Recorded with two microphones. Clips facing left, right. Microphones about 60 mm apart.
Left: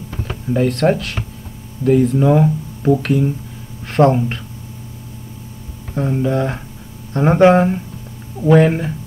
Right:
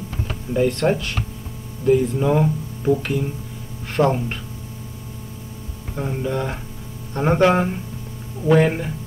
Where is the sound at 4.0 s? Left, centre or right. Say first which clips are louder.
Left 6 dB; centre.